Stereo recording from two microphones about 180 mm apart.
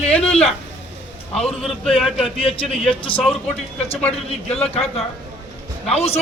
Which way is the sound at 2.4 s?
30° left (ahead or behind).